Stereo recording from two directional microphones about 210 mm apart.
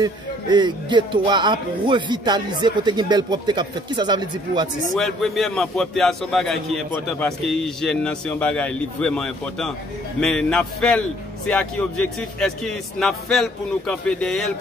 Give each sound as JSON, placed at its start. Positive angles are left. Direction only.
{"t": 0.0, "sound": "speech", "side_deg": -20}
{"t": 4.9, "sound": "a man's voice", "side_deg": 0}